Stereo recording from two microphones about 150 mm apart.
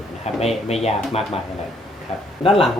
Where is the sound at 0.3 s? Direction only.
45° left (ahead or behind).